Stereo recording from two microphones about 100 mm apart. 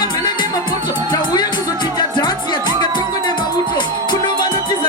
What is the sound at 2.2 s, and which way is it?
Music, 45° left (ahead or behind).